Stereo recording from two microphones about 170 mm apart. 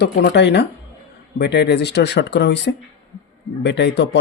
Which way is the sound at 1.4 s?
75° left (ahead or behind).